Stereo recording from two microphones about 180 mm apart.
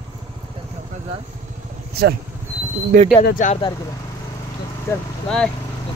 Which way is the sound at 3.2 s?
50° left (ahead or behind).